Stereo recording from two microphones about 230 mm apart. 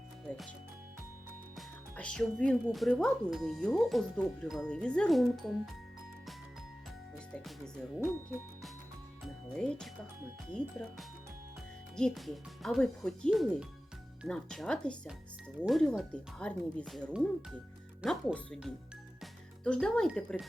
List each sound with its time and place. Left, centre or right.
0.3 s speech: centre
1.5 s speech: centre
7.3 s speech: centre
9.2 s speech: centre